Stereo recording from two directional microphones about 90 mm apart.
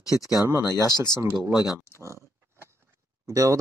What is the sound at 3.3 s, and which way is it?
Speech, 35° right (ahead or behind).